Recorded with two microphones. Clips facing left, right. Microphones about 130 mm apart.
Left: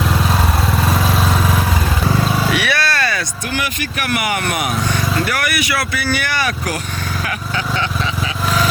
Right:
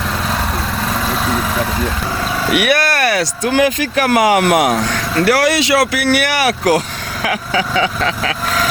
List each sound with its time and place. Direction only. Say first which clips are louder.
2.5 s vehicle: right 4 dB; 50° right (ahead or behind); by 3.5 s 75° right (ahead or behind)
3.9 s speech: right 8 dB; 90° right